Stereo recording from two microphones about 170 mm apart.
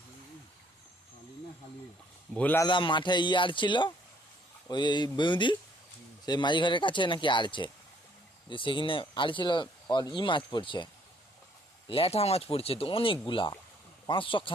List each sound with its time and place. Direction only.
2.3 s a man's voice: 10° left (ahead or behind)
2.6 s speech: 30° left (ahead or behind)
11.9 s speech: 35° left (ahead or behind)